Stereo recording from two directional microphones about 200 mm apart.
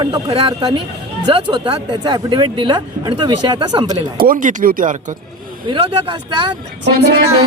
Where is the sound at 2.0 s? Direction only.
20° right (ahead or behind).